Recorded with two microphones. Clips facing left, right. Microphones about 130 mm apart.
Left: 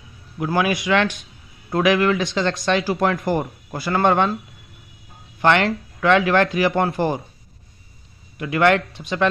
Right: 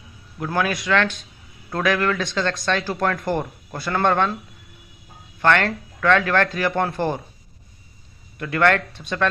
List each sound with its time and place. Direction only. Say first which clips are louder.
0.4 s speech: left 3 dB; 10° left (ahead or behind)
5.4 s speech: left 2 dB; 15° left (ahead or behind)
8.4 s speech: left 2 dB; 10° left (ahead or behind)